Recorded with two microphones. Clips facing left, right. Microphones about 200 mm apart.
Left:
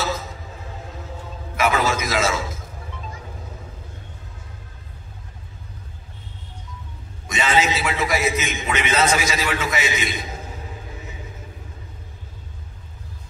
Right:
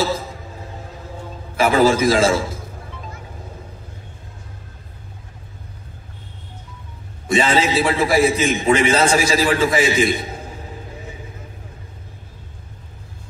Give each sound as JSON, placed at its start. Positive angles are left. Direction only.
{"t": 1.6, "sound": "a man's voice", "side_deg": -30}
{"t": 7.2, "sound": "a man's voice", "side_deg": -30}